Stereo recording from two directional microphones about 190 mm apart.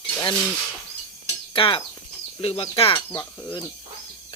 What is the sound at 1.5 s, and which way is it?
Cutlery, 25° left (ahead or behind).